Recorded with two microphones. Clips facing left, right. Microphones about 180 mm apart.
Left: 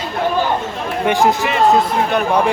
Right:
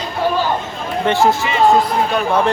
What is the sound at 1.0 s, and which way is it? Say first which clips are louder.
Speech: even; 15° left (ahead or behind).